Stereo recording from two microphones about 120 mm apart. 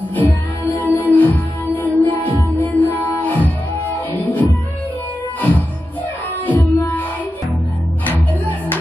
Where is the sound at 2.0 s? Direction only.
15° left (ahead or behind).